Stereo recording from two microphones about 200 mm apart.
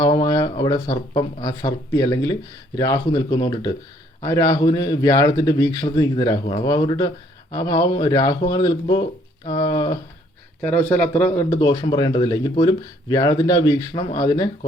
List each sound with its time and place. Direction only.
0.0 s speech: 20° left (ahead or behind)
10.6 s speech: 5° left (ahead or behind)